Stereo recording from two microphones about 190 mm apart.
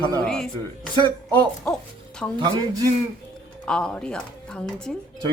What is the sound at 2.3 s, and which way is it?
Speech, 25° right (ahead or behind).